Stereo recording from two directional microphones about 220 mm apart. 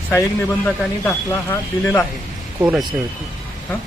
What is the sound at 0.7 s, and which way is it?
Speech, 10° left (ahead or behind).